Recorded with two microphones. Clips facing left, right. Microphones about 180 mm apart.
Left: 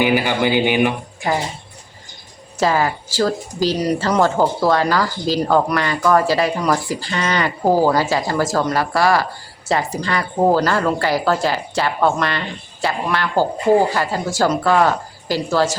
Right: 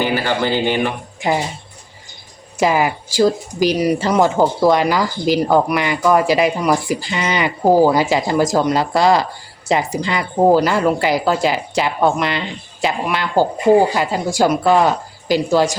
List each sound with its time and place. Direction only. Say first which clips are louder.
0.0 s speech: left 1 dB; 15° left (ahead or behind)
2.6 s speech: right 2 dB; 15° right (ahead or behind)